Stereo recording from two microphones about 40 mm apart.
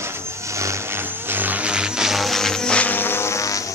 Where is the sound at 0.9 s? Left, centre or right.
Right.